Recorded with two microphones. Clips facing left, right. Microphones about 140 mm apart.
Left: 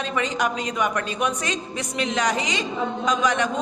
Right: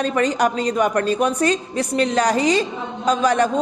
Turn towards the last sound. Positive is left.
turn(degrees=-35)  # may be behind; listen again after turning